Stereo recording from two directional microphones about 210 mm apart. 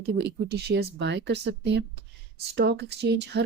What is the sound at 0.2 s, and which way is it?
Speech, 50° right (ahead or behind).